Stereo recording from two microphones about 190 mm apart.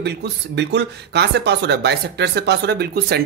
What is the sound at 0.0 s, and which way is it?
Speech, 60° right (ahead or behind).